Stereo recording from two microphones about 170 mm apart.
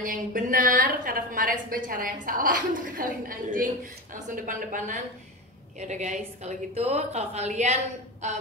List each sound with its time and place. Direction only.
0.0 s a woman's voice: 55° right (ahead or behind)